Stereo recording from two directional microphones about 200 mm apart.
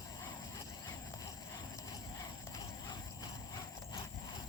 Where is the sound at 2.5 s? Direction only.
20° left (ahead or behind).